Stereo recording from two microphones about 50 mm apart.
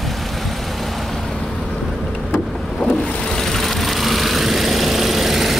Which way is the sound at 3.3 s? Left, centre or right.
Centre.